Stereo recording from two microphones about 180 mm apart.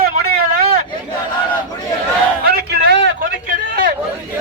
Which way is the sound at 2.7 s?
65° right (ahead or behind).